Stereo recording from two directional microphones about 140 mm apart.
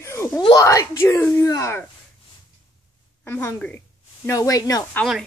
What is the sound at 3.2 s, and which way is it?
A woman's voice, 15° left (ahead or behind).